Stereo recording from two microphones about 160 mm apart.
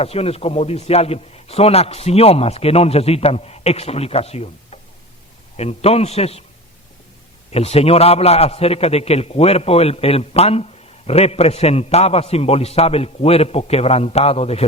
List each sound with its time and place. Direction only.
0.0 s a man's voice: 40° left (ahead or behind)
7.5 s a man's voice: 40° left (ahead or behind)